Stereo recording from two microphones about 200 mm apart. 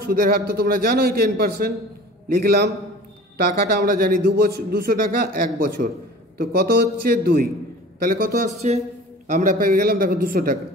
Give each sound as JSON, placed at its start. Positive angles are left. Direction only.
{"t": 0.0, "sound": "a man's voice", "side_deg": -50}
{"t": 9.3, "sound": "a man's voice", "side_deg": -45}